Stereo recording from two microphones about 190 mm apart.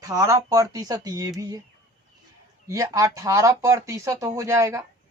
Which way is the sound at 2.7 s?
15° right (ahead or behind).